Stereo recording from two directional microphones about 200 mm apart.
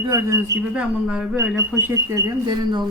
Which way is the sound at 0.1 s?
15° right (ahead or behind).